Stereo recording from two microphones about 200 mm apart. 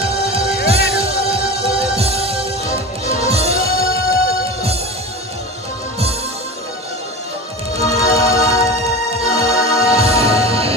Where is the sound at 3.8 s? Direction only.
50° left (ahead or behind).